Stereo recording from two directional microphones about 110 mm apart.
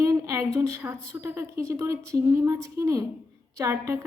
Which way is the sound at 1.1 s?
25° right (ahead or behind).